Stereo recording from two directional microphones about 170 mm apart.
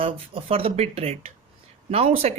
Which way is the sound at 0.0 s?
35° right (ahead or behind).